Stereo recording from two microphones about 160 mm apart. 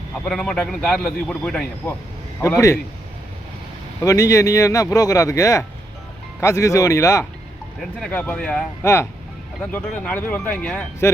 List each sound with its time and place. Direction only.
0.3 s a man's voice: 5° left (ahead or behind)
4.0 s speech: 20° left (ahead or behind)